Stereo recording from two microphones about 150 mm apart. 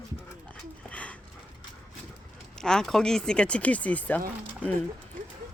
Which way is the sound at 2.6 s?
5° left (ahead or behind).